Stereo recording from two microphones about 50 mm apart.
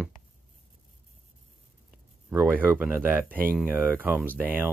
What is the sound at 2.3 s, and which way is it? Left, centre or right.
Speech, right.